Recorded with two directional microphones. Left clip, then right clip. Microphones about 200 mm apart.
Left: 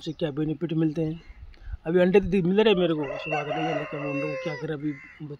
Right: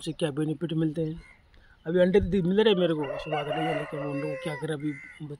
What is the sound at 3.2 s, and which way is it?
Speech, 25° left (ahead or behind).